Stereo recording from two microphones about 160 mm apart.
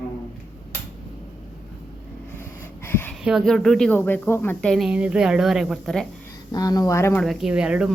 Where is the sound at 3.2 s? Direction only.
Centre (ahead or behind).